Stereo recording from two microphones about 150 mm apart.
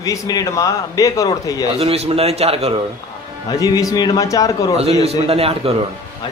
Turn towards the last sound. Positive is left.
turn(degrees=-40)  # may be behind; listen again after turning